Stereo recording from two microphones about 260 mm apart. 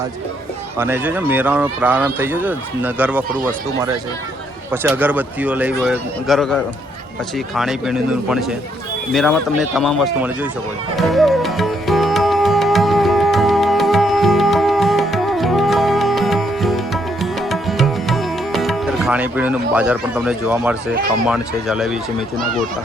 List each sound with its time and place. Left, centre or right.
0.8 s speech: centre
4.7 s speech: centre
10.9 s music: centre
21.2 s speech: centre